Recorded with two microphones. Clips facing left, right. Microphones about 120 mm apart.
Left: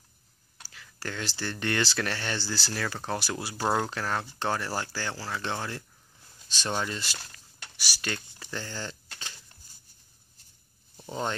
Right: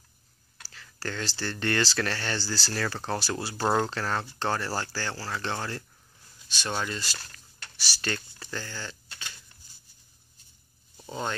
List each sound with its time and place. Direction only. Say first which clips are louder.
0.6 s speech: right 2 dB; 15° left (ahead or behind)
11.0 s speech: left 1 dB; 20° left (ahead or behind)